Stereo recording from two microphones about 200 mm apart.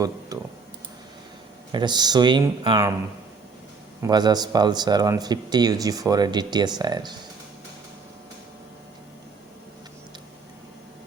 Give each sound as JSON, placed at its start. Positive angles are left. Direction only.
{"t": 0.3, "sound": "computer keyboard", "side_deg": -15}
{"t": 1.7, "sound": "speech", "side_deg": -20}
{"t": 4.0, "sound": "speech", "side_deg": -20}